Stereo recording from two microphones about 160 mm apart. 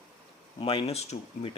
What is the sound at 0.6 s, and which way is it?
Speech, 35° left (ahead or behind).